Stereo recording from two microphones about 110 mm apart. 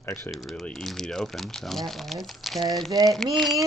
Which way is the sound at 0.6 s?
5° left (ahead or behind).